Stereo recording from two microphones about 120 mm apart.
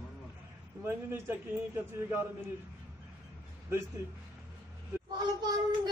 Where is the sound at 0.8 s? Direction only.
20° right (ahead or behind).